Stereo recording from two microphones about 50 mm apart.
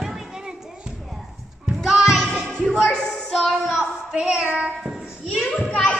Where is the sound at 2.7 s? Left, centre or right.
Centre.